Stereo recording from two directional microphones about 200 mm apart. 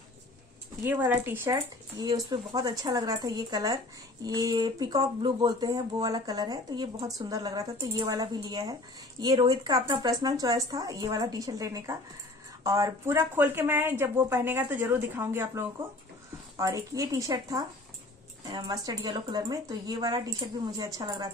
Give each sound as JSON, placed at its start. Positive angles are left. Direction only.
{"t": 0.8, "sound": "speech", "side_deg": -10}